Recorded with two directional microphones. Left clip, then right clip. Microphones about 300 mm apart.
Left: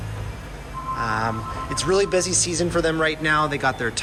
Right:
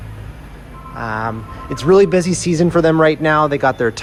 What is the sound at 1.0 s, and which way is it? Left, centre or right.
Speech, centre.